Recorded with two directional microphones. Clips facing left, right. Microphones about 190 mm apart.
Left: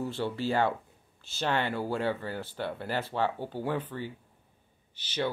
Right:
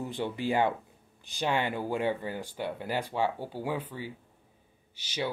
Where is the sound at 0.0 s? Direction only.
15° right (ahead or behind).